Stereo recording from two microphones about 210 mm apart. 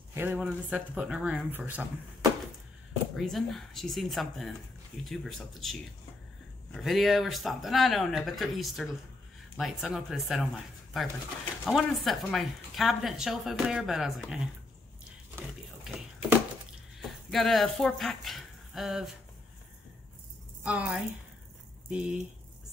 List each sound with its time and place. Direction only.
0.1 s speech: 10° right (ahead or behind)
3.2 s a woman's voice: centre (ahead or behind)
15.0 s keys jangling: 5° right (ahead or behind)
17.3 s speech: centre (ahead or behind)
20.6 s a woman's voice: 5° right (ahead or behind)